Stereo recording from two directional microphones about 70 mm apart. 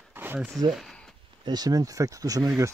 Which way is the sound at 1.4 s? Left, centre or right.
Right.